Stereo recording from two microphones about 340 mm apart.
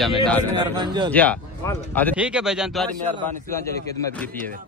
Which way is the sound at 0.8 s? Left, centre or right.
Centre.